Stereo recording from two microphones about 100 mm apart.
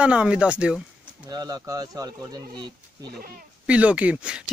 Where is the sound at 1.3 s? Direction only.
40° right (ahead or behind).